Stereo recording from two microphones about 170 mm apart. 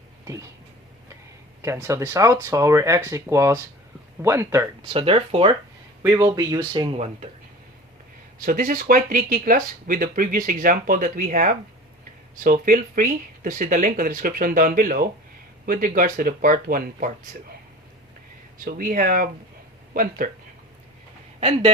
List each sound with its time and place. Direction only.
1.6 s speech: 15° right (ahead or behind)
4.9 s speech: 35° right (ahead or behind)
6.0 s speech: 15° right (ahead or behind)
6.9 s speech: 40° right (ahead or behind)
8.4 s speech: 50° right (ahead or behind)
18.6 s speech: 55° right (ahead or behind)